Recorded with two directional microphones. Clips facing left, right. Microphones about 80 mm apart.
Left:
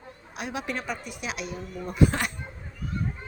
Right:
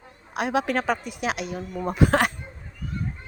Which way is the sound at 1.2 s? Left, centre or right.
Right.